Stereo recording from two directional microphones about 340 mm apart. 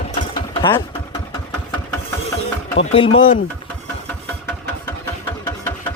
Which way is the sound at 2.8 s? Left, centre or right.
Centre.